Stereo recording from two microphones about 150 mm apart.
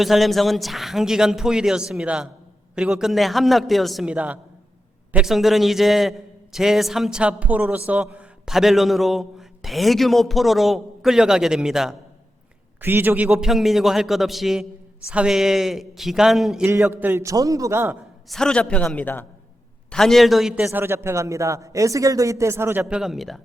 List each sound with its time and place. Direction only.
0.0 s a man's voice: centre (ahead or behind)
12.8 s a man's voice: 15° right (ahead or behind)
16.6 s a man's voice: 15° right (ahead or behind)
18.3 s a man's voice: 5° left (ahead or behind); by 22.9 s 15° right (ahead or behind)
22.9 s a man's voice: centre (ahead or behind)